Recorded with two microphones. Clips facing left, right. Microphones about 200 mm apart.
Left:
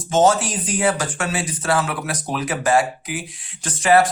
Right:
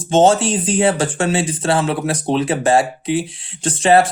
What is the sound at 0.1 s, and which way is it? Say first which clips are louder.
Speech: right 4 dB; 25° right (ahead or behind).